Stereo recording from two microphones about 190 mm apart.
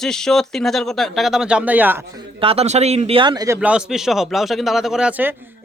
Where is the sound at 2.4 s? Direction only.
30° right (ahead or behind).